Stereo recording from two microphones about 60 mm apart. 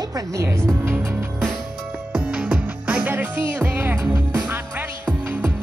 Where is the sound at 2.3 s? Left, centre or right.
Centre.